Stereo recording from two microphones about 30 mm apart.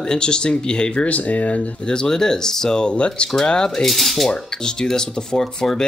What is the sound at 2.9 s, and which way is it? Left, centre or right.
Speech, left.